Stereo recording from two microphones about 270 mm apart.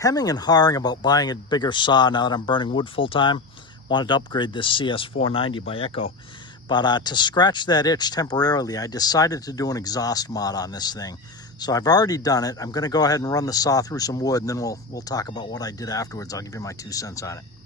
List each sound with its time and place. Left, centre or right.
0.0 s speech: centre